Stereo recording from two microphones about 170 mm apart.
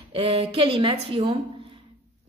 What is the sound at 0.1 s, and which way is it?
A woman's voice, 35° right (ahead or behind).